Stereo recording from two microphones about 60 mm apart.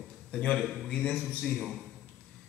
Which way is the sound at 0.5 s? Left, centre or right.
Centre.